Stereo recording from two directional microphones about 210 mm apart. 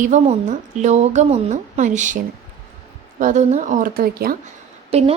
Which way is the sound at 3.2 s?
35° right (ahead or behind).